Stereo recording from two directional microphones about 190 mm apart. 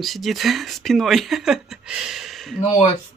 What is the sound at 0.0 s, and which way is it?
Speech, centre (ahead or behind).